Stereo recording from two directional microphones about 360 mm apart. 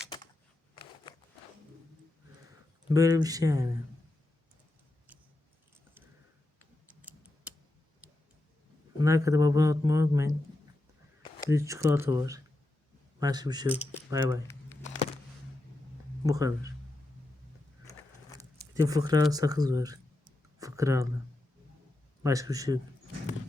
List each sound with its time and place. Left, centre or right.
1.1 s a sound: centre
2.9 s a man's voice: centre
9.0 s a man's voice: centre
11.4 s a man's voice: centre
14.8 s a sound: centre
16.2 s a man's voice: centre
18.7 s a man's voice: centre
20.6 s a sound: centre
22.2 s a man's voice: centre